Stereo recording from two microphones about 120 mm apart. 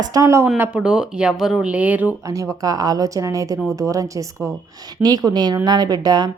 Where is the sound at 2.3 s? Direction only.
30° right (ahead or behind).